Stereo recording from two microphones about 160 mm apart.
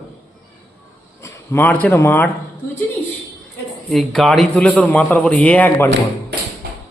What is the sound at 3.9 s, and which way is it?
A man's voice, centre (ahead or behind).